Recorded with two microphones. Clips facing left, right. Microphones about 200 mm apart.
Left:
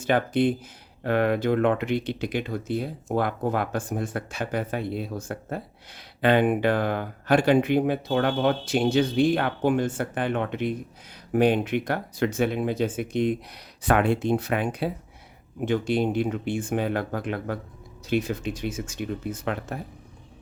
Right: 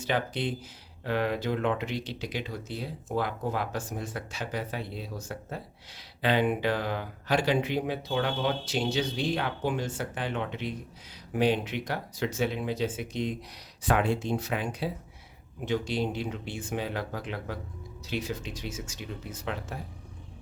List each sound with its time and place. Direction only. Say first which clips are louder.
0.0 s speech: left 8 dB; 50° left (ahead or behind)